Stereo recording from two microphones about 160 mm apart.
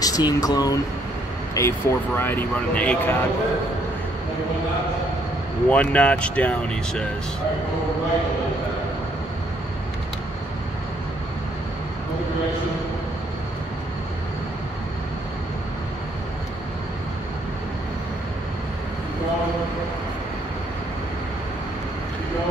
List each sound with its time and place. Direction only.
0.0 s speech: 25° left (ahead or behind)
5.7 s speech: 10° left (ahead or behind)